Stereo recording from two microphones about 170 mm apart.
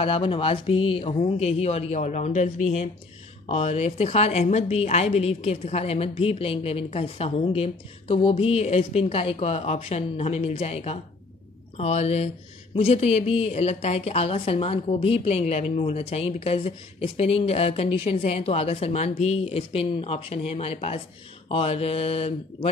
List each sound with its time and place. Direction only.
0.0 s a woman's voice: 30° left (ahead or behind)